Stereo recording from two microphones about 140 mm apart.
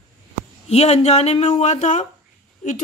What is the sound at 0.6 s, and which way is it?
Speech, 50° left (ahead or behind).